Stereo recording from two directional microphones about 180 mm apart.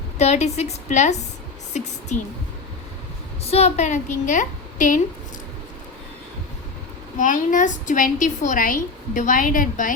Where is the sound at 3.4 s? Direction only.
35° left (ahead or behind).